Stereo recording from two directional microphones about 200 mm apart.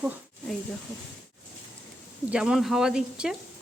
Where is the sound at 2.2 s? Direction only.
5° right (ahead or behind).